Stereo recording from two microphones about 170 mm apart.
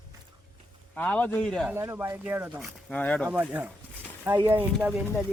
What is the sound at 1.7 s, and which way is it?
Speech, 15° right (ahead or behind).